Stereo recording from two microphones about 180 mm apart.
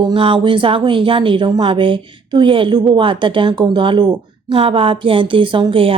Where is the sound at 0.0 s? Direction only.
30° right (ahead or behind).